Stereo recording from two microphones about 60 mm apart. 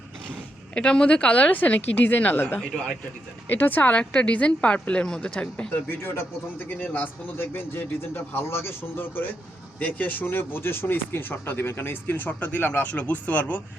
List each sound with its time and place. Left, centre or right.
0.7 s speech: centre
5.9 s speech: left
6.7 s speech: left